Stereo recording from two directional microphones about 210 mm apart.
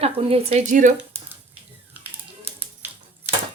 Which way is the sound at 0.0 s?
25° right (ahead or behind).